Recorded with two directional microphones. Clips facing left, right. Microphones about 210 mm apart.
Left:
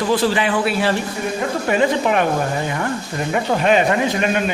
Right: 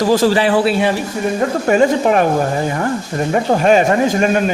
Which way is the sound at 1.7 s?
40° right (ahead or behind).